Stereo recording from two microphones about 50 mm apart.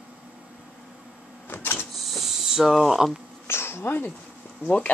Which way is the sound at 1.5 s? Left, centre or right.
Left.